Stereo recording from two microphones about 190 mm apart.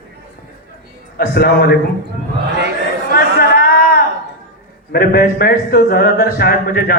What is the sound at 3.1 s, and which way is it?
Chatter, 55° left (ahead or behind).